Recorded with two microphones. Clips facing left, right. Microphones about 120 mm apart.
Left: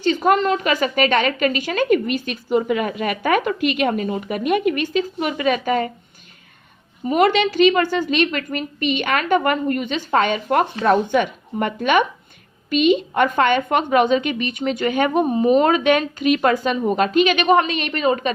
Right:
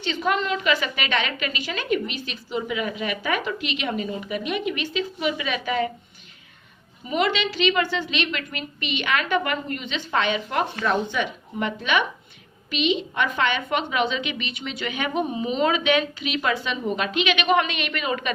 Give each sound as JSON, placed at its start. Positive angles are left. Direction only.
{"t": 0.0, "sound": "a woman's voice", "side_deg": 45}
{"t": 7.0, "sound": "a woman's voice", "side_deg": 50}